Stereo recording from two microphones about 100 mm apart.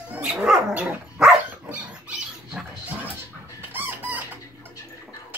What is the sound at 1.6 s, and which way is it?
Rodents, 15° right (ahead or behind).